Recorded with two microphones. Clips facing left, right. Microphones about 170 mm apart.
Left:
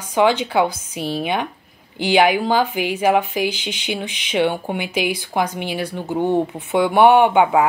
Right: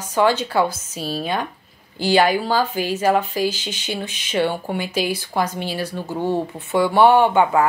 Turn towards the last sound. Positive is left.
turn(degrees=15)  # may be behind; listen again after turning